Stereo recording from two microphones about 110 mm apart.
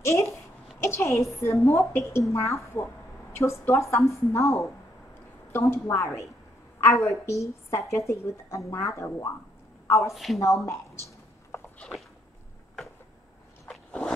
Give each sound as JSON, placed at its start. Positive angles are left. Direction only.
{"t": 0.0, "sound": "a child's voice", "side_deg": 25}
{"t": 10.1, "sound": "a woman's voice", "side_deg": 0}
{"t": 10.4, "sound": "a woman's voice", "side_deg": 25}
{"t": 13.7, "sound": "a sound", "side_deg": 5}